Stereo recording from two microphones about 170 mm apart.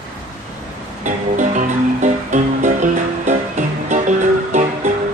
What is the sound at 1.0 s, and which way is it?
Music, 45° right (ahead or behind).